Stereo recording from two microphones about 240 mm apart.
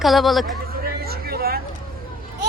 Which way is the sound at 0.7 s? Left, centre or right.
Right.